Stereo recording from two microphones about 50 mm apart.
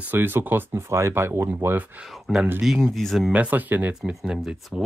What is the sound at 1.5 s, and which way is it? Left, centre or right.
Speech, right.